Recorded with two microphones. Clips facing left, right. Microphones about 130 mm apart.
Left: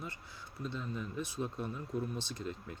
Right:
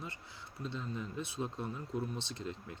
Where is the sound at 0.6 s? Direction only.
30° right (ahead or behind).